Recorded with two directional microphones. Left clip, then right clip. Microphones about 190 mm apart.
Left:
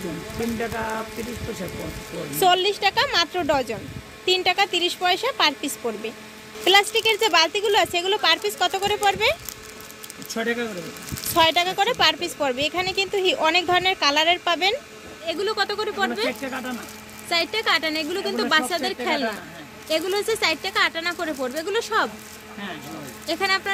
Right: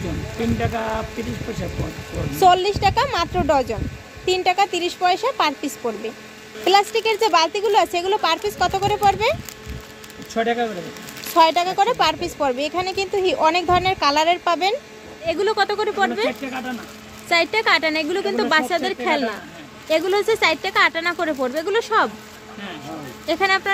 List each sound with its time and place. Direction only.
0.6 s speech: 35° right (ahead or behind)
2.4 s speech: 10° right (ahead or behind)
10.3 s speech: 5° left (ahead or behind)
11.3 s speech: 10° right (ahead or behind)
23.2 s speech: 15° right (ahead or behind)